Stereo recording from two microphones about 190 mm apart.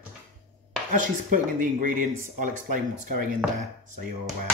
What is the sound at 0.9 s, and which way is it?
Speech, 45° right (ahead or behind).